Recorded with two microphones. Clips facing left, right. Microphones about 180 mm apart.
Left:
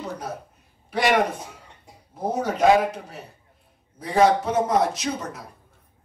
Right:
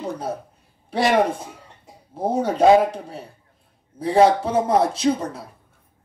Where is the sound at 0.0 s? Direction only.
30° right (ahead or behind).